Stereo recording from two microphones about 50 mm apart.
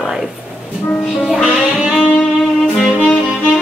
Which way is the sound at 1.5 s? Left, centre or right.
Centre.